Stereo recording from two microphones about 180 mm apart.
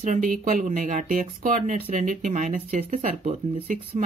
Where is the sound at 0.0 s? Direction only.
45° right (ahead or behind).